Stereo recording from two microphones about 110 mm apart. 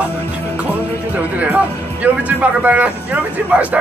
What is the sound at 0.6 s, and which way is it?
Music, 15° right (ahead or behind).